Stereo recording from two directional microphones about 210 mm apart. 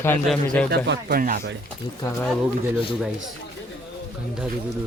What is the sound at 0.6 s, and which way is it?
Speech, 55° right (ahead or behind).